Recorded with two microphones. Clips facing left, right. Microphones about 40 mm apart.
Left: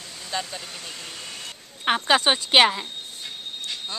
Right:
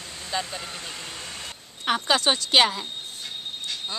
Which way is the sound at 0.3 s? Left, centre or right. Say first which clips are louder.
Right 1 dB; centre.